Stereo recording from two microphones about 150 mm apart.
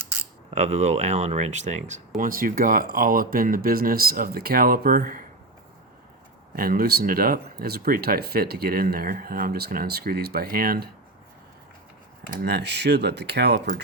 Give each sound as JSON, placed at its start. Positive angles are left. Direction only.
{"t": 0.5, "sound": "speech", "side_deg": -50}
{"t": 6.6, "sound": "speech", "side_deg": -80}
{"t": 12.3, "sound": "speech", "side_deg": -90}